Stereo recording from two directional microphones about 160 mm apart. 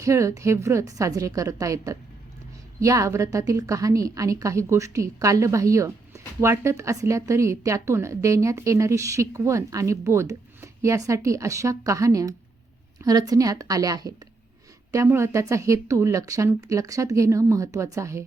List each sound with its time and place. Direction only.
0.0 s a woman's voice: 20° right (ahead or behind)